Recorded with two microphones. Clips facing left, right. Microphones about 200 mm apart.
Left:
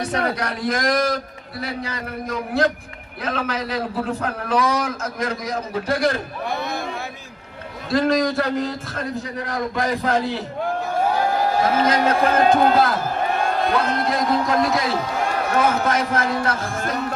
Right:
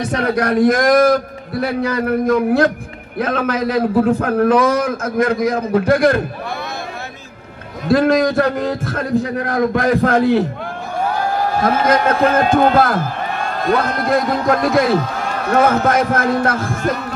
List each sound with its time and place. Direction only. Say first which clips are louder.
0.1 s a man's voice: right 7 dB; 50° right (ahead or behind)
7.9 s a man's voice: right 6 dB; 55° right (ahead or behind)
11.8 s a man's voice: right 5 dB; 50° right (ahead or behind)
14.0 s a man's voice: right 5 dB; 50° right (ahead or behind)